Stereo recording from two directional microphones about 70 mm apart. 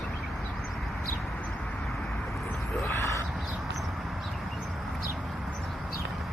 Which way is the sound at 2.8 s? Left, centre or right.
Left.